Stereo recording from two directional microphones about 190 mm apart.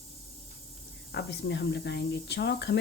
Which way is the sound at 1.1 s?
60° left (ahead or behind).